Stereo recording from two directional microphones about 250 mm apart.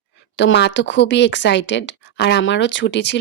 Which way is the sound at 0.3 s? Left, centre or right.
Left.